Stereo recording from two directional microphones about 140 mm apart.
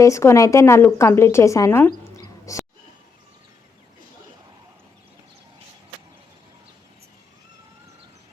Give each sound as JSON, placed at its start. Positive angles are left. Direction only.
{"t": 0.0, "sound": "a woman's voice", "side_deg": 20}